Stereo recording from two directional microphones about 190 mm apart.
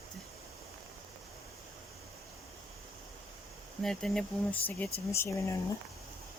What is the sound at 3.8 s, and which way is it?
Speech, 5° left (ahead or behind).